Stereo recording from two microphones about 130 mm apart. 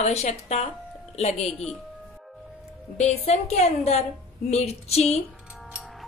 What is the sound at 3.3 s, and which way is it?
Speech, 55° left (ahead or behind).